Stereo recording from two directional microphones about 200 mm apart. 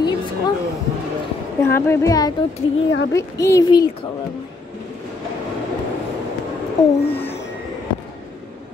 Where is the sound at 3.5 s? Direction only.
20° left (ahead or behind).